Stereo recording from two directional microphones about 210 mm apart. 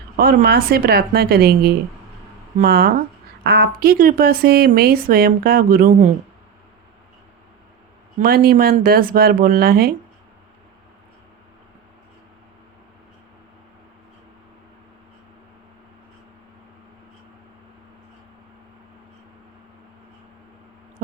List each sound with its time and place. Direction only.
0.2 s a woman's voice: 45° right (ahead or behind)
8.2 s a woman's voice: 45° right (ahead or behind)